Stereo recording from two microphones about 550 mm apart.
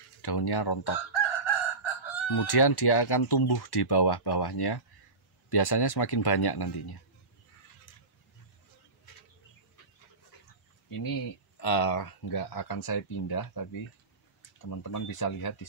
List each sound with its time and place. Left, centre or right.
0.2 s chicken: left
5.5 s speech: left
7.9 s a sound: left
10.9 s speech: left
14.7 s speech: left